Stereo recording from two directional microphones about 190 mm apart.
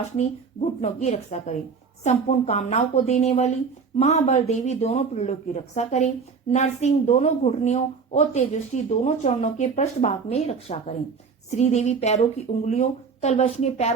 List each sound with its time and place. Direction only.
0.2 s speech: 35° left (ahead or behind)